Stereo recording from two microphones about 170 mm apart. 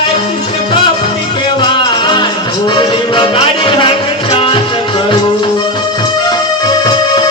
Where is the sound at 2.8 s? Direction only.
30° left (ahead or behind).